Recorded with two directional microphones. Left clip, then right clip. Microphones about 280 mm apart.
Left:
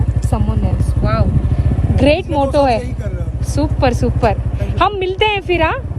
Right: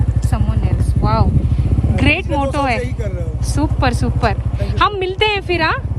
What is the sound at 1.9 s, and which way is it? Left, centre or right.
A woman's voice, centre.